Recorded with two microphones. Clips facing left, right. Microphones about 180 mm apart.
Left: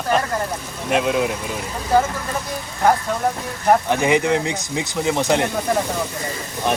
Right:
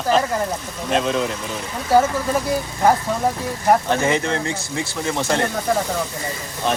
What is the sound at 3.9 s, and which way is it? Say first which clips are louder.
Speech: left 2 dB; 15° left (ahead or behind).